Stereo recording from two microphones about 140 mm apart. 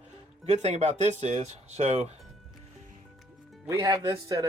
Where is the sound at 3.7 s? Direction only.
25° right (ahead or behind).